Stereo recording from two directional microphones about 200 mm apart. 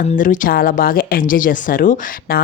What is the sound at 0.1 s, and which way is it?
Speech, 40° left (ahead or behind).